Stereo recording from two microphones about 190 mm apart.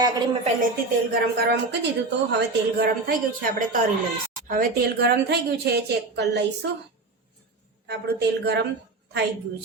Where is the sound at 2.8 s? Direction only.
45° right (ahead or behind); by 6.7 s 65° right (ahead or behind).